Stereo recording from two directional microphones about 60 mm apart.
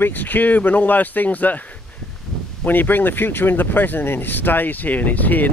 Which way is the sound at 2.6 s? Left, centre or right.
Left.